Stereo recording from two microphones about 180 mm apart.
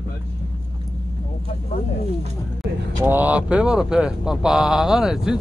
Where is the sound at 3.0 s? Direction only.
10° right (ahead or behind).